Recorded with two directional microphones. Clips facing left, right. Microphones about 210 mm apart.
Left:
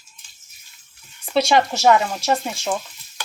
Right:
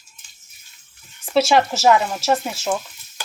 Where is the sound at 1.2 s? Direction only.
Centre (ahead or behind).